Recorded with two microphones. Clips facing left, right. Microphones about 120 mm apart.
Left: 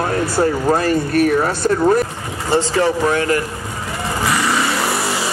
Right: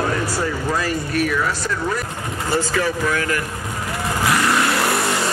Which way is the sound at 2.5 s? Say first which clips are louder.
Left 5 dB; 30° left (ahead or behind).